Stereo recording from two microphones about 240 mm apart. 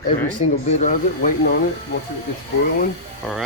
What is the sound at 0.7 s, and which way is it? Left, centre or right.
Speech, left.